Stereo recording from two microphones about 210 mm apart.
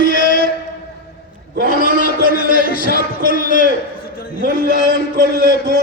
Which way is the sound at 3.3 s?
40° left (ahead or behind).